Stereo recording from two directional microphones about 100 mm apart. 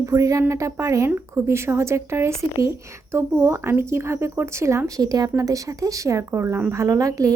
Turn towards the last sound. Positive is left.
turn(degrees=-35)  # may be behind; listen again after turning